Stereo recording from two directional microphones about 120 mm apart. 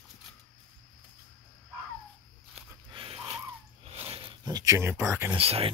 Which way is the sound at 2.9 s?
45° right (ahead or behind).